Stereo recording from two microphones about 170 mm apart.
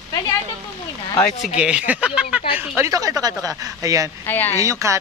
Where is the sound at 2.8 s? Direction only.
20° right (ahead or behind).